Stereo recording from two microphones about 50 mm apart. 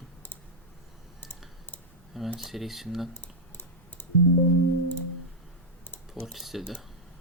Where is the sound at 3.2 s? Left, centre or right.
Left.